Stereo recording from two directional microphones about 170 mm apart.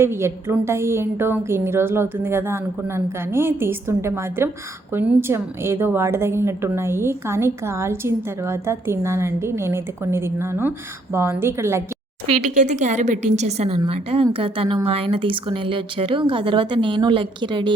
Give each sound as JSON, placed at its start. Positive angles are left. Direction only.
{"t": 0.0, "sound": "a woman's voice", "side_deg": -15}
{"t": 12.5, "sound": "a woman's voice", "side_deg": -45}